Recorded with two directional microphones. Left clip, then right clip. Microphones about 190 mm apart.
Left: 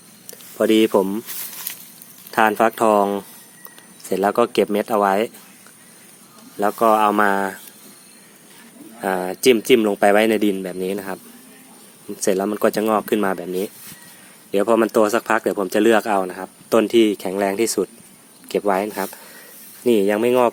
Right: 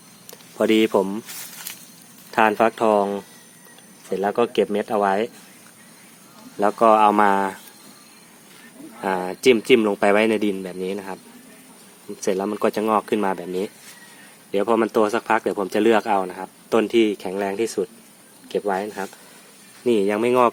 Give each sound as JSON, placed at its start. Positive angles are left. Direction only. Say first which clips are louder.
{"t": 0.3, "sound": "a sound", "louder": "left 2 dB", "side_deg": -5}
{"t": 0.7, "sound": "speech", "louder": "left 2 dB", "side_deg": 10}
{"t": 2.3, "sound": "speech", "louder": "left 1 dB", "side_deg": 15}
{"t": 6.6, "sound": "speech", "louder": "right 1 dB", "side_deg": 0}
{"t": 9.0, "sound": "speech", "louder": "left 2 dB", "side_deg": 10}
{"t": 12.2, "sound": "speech", "louder": "left 3 dB", "side_deg": 20}
{"t": 19.8, "sound": "speech", "louder": "left 3 dB", "side_deg": 15}